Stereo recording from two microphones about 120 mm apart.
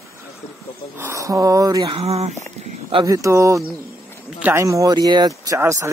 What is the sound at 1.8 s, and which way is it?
Speech, 55° right (ahead or behind).